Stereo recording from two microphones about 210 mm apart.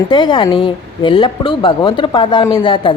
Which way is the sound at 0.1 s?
20° left (ahead or behind).